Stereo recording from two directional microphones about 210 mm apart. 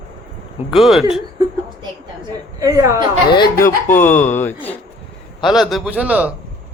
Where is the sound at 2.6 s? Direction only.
15° right (ahead or behind).